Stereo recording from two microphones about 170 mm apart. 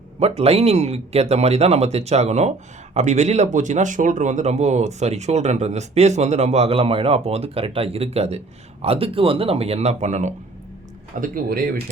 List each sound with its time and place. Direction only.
0.2 s speech: 35° right (ahead or behind)
11.2 s speech: 60° right (ahead or behind)